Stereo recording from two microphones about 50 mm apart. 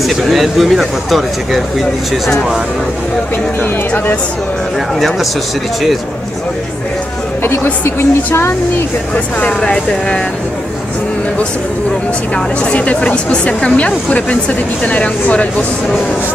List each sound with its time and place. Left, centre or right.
0.0 s speech: centre
4.9 s speech: centre
7.4 s a woman's voice: left
9.1 s speech: left
12.4 s speech: left